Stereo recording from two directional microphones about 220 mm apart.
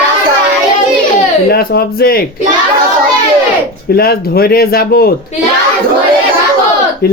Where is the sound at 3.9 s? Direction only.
45° left (ahead or behind).